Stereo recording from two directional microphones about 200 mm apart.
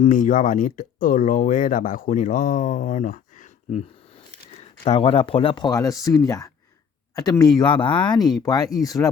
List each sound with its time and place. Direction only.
0.0 s speech: 40° left (ahead or behind)
4.9 s speech: 25° left (ahead or behind)